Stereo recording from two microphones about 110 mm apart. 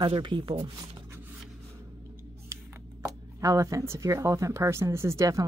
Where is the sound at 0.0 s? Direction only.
45° right (ahead or behind).